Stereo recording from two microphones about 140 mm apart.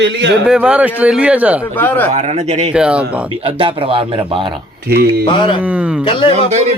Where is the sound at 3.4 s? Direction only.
40° right (ahead or behind).